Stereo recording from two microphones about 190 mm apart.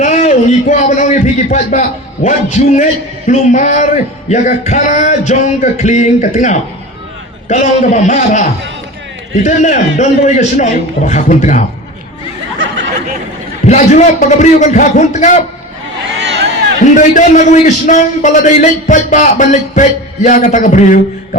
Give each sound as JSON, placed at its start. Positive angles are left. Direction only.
{"t": 0.0, "sound": "a man's voice", "side_deg": 40}
{"t": 13.7, "sound": "a man's voice", "side_deg": 40}
{"t": 16.8, "sound": "a man's voice", "side_deg": 40}